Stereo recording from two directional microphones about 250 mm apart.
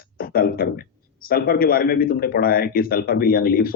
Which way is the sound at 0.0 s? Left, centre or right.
Left.